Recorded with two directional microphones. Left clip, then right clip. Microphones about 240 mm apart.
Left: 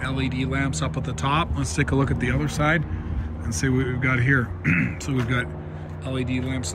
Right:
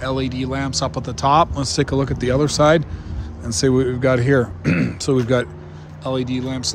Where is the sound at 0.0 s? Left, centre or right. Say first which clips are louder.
Right 5 dB; centre.